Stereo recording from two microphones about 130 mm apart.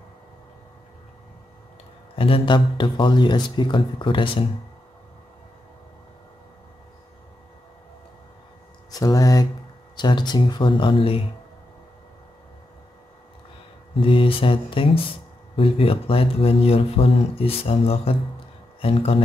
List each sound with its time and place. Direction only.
2.1 s speech: 45° left (ahead or behind)
8.9 s speech: 25° left (ahead or behind); by 11.1 s 45° left (ahead or behind)
13.9 s speech: 40° left (ahead or behind)